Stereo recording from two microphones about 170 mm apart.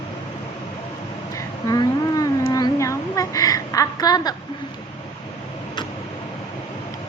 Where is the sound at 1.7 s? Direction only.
20° left (ahead or behind).